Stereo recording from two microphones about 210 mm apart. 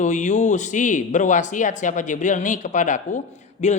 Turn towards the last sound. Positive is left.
turn(degrees=35)  # may be behind; listen again after turning